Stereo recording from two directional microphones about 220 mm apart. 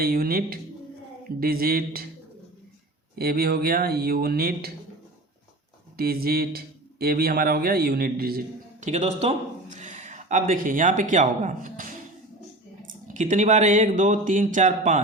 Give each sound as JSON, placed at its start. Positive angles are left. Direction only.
{"t": 0.0, "sound": "speech", "side_deg": -40}
{"t": 3.2, "sound": "speech", "side_deg": -45}
{"t": 6.0, "sound": "a man's voice", "side_deg": -45}
{"t": 13.1, "sound": "speech", "side_deg": -35}